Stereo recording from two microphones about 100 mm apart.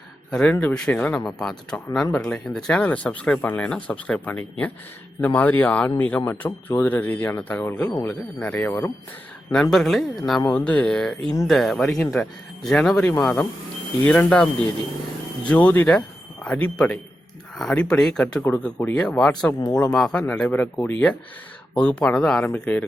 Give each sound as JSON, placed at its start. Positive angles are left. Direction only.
{"t": 0.3, "sound": "speech", "side_deg": 10}
{"t": 9.5, "sound": "speech", "side_deg": 5}